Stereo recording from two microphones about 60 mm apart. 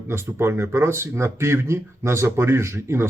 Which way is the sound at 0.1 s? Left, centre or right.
Right.